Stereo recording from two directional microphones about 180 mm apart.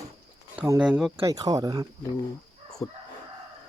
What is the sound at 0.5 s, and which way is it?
Speech, 10° right (ahead or behind).